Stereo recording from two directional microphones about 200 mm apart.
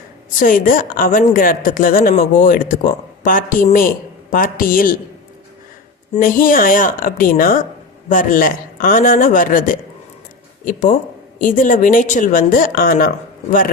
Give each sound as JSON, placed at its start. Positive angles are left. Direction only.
{"t": 0.3, "sound": "a woman's voice", "side_deg": 45}
{"t": 6.1, "sound": "a woman's voice", "side_deg": 45}